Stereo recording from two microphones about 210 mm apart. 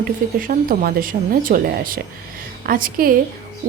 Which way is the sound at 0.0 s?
40° right (ahead or behind).